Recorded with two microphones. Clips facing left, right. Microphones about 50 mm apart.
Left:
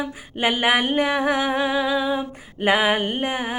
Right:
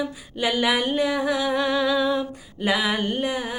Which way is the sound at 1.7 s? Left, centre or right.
Centre.